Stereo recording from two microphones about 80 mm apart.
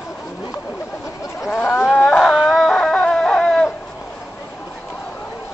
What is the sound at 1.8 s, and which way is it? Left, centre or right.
Dog, centre.